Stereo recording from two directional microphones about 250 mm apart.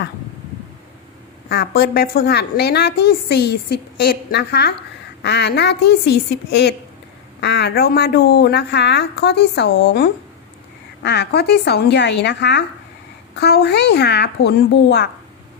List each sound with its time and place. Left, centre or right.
1.5 s a woman's voice: left